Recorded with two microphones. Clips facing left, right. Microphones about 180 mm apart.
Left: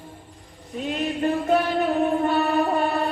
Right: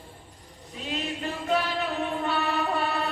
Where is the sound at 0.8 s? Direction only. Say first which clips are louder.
Left 8 dB; 55° left (ahead or behind).